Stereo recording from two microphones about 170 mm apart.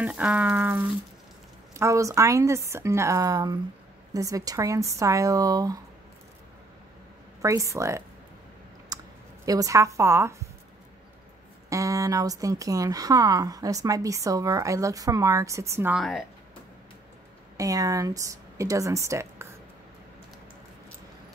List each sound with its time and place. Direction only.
0.0 s a woman's voice: 10° right (ahead or behind)
7.4 s a woman's voice: 20° right (ahead or behind)
8.9 s clicking: 20° right (ahead or behind)
9.5 s a woman's voice: 20° right (ahead or behind)
11.7 s speech: 20° right (ahead or behind)
16.0 s speech: centre (ahead or behind)
17.6 s speech: 20° right (ahead or behind)